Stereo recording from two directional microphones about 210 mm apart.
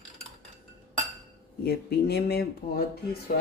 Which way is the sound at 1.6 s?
50° left (ahead or behind).